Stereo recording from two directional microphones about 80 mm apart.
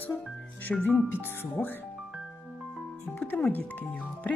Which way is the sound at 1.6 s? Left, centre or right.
Centre.